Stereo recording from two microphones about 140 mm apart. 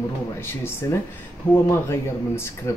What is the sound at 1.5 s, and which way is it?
Speech, 20° left (ahead or behind).